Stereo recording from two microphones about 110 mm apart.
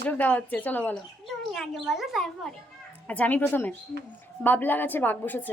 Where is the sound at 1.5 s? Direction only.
Centre (ahead or behind).